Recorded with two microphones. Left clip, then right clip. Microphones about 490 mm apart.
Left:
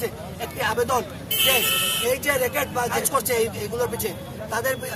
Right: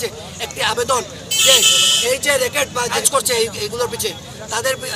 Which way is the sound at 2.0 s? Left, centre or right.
Left.